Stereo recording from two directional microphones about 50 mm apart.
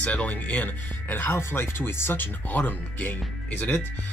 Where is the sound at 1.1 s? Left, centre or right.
Left.